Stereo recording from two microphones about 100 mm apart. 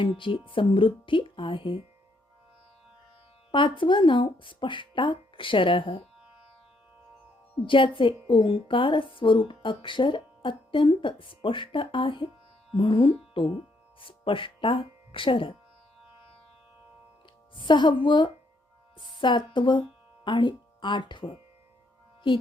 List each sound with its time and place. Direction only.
0.0 s speech: 55° left (ahead or behind)
3.5 s speech: 55° left (ahead or behind)
7.6 s speech: 55° left (ahead or behind)
17.5 s speech: 55° left (ahead or behind)